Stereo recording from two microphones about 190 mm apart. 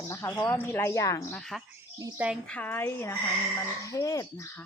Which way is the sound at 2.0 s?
15° right (ahead or behind).